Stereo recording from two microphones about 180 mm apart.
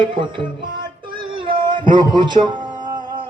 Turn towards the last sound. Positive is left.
turn(degrees=-25)  # may be behind; listen again after turning